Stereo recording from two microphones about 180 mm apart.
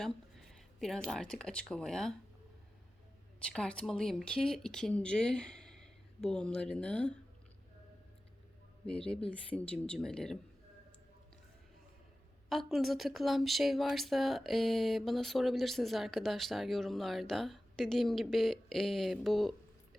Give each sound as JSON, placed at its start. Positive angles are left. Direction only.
{"t": 0.0, "sound": "speech", "side_deg": 0}
{"t": 3.4, "sound": "speech", "side_deg": 5}
{"t": 8.9, "sound": "speech", "side_deg": 5}
{"t": 12.5, "sound": "speech", "side_deg": 0}